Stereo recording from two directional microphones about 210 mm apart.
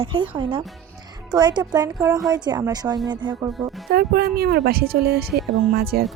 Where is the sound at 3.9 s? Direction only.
50° right (ahead or behind).